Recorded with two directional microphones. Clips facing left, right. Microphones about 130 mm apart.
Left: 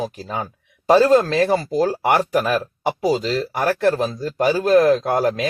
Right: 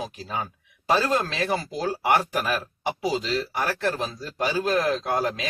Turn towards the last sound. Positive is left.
turn(degrees=45)  # may be behind; listen again after turning